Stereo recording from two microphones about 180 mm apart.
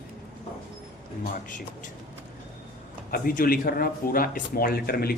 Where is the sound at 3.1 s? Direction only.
50° left (ahead or behind).